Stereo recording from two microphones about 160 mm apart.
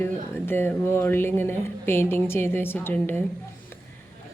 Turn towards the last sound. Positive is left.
turn(degrees=10)  # may be behind; listen again after turning